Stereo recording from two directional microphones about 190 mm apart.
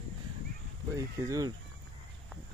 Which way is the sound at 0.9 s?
15° right (ahead or behind).